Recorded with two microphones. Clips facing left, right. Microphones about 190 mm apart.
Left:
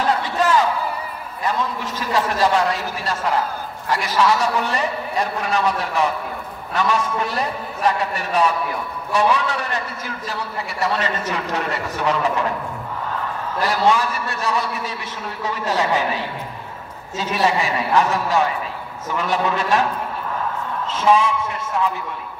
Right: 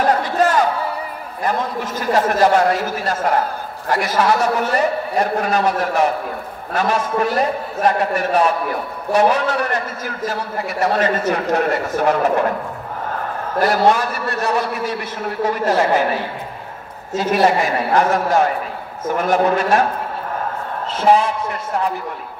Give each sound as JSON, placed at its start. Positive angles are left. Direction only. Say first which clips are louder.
{"t": 0.0, "sound": "crowd", "louder": "right 4 dB", "side_deg": -50}
{"t": 1.4, "sound": "a man's voice", "louder": "right 2 dB", "side_deg": -55}
{"t": 3.9, "sound": "a man's voice", "louder": "right 2 dB", "side_deg": -55}
{"t": 13.6, "sound": "a man's voice", "louder": "right 3 dB", "side_deg": -55}
{"t": 17.2, "sound": "a man's voice", "louder": "right 4 dB", "side_deg": -50}
{"t": 20.9, "sound": "a woman's voice", "louder": "right 2 dB", "side_deg": -55}